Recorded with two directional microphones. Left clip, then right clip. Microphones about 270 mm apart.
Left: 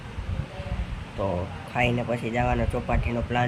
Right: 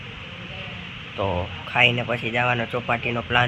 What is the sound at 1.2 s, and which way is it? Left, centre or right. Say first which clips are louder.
Speech: right 3 dB; centre.